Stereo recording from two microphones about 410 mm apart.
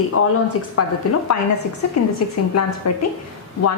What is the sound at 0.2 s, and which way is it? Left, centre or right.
Speech, left.